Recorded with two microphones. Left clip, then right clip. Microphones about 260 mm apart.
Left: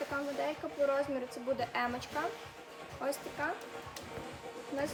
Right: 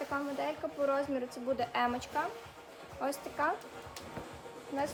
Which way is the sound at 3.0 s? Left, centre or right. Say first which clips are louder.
Right 3 dB; centre.